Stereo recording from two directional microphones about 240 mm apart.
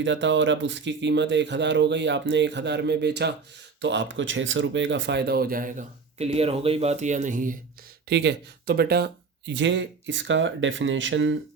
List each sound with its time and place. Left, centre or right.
0.0 s speech: right
8.1 s speech: right